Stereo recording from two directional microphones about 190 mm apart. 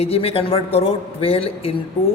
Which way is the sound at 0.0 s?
30° left (ahead or behind).